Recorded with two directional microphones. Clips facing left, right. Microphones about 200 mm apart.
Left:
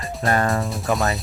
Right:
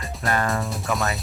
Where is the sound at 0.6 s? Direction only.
Centre (ahead or behind).